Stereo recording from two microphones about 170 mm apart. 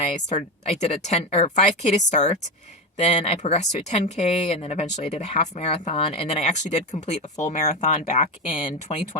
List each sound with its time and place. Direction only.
0.0 s speech: 45° left (ahead or behind)